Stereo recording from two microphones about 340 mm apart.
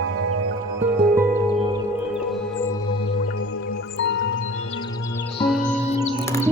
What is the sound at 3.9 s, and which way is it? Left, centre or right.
Music, left.